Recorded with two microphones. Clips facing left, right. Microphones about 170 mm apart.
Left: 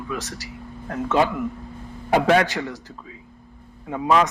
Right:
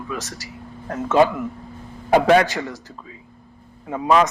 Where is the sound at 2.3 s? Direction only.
40° right (ahead or behind).